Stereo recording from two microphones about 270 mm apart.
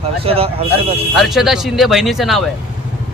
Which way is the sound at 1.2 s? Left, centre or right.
Centre.